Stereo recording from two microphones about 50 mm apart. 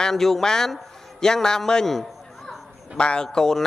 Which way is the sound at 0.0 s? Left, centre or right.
Centre.